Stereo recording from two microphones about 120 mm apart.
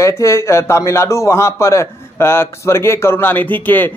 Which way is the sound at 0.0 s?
25° left (ahead or behind).